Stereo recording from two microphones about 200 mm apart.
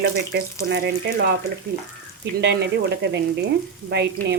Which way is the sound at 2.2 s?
55° right (ahead or behind).